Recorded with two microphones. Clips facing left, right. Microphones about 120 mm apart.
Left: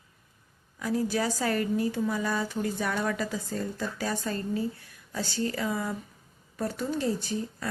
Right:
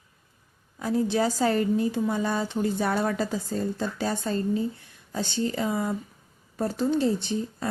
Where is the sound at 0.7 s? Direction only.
25° right (ahead or behind).